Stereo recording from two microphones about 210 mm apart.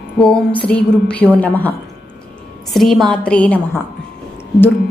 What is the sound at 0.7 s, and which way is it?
Music, 5° left (ahead or behind).